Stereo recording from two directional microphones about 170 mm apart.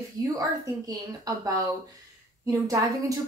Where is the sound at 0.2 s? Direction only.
20° right (ahead or behind).